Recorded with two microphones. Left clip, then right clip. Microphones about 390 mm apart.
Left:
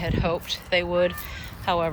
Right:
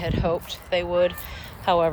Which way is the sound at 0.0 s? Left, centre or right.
Centre.